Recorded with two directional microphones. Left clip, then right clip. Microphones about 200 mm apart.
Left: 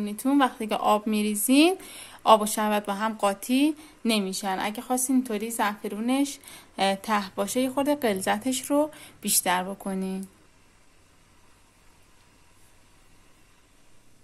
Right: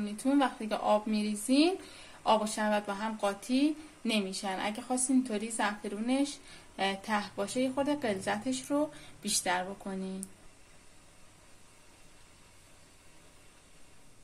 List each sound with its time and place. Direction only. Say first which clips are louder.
0.0 s speech: left 6 dB; 35° left (ahead or behind)